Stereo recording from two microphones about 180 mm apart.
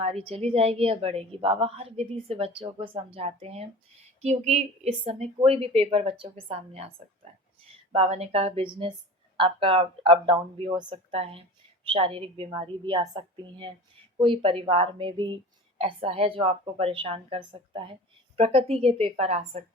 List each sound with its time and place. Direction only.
0.0 s a woman's voice: 35° right (ahead or behind)